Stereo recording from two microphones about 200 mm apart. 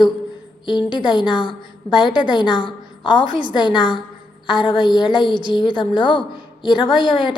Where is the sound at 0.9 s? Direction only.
20° left (ahead or behind).